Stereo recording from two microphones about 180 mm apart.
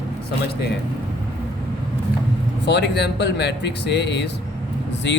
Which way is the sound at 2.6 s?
70° left (ahead or behind).